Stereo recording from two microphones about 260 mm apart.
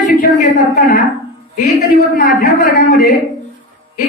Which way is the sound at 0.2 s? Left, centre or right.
Left.